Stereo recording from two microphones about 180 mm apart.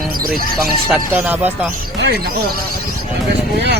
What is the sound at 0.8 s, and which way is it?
Speech, 5° right (ahead or behind).